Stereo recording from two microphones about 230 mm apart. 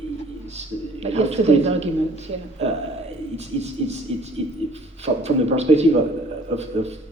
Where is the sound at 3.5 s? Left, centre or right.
Right.